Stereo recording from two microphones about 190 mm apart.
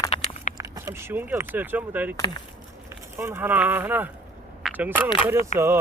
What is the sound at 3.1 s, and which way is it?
Speech, 10° right (ahead or behind).